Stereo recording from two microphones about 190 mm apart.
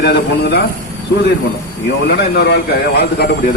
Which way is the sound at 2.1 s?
60° left (ahead or behind).